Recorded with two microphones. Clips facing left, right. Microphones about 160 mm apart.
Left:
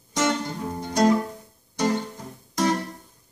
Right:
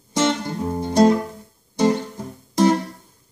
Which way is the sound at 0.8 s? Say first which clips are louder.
Right 6 dB; 30° right (ahead or behind).